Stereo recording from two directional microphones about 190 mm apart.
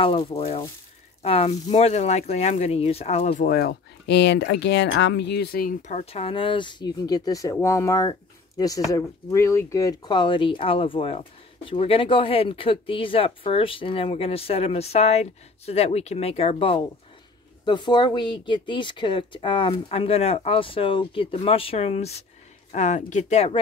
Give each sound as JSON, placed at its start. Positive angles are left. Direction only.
{"t": 0.0, "sound": "speech", "side_deg": 30}
{"t": 3.4, "sound": "speech", "side_deg": 55}